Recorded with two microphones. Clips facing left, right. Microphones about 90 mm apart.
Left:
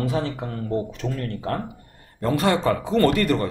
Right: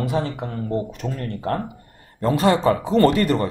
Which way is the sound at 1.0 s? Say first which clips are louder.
Even; 20° right (ahead or behind).